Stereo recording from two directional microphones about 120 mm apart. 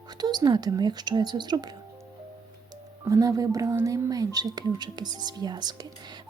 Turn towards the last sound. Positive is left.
turn(degrees=-35)  # may be behind; listen again after turning